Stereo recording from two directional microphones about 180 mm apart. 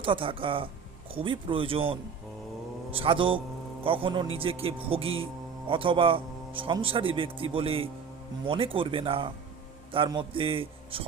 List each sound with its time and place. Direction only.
0.0 s speech: 30° right (ahead or behind)